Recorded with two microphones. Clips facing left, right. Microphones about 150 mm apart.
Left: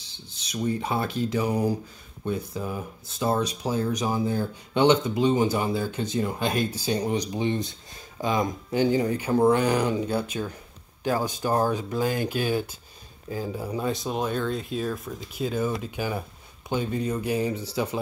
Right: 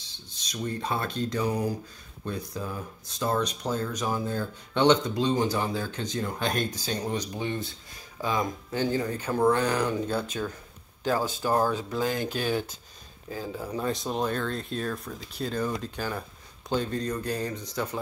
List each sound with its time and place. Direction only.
0.5 s speech: 10° left (ahead or behind)